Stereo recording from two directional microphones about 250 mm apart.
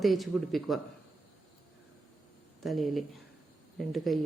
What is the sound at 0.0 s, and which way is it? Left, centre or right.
Speech, centre.